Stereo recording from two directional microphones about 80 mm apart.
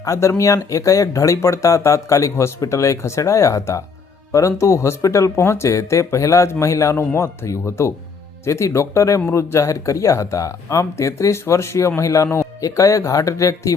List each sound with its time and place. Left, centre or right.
0.0 s speech: left